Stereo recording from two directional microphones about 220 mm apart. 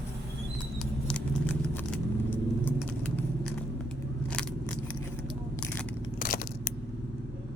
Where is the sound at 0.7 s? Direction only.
5° left (ahead or behind).